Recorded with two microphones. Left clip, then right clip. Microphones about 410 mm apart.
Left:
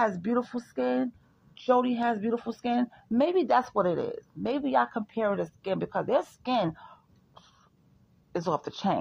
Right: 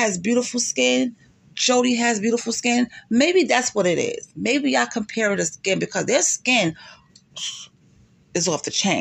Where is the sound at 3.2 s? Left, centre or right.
Left.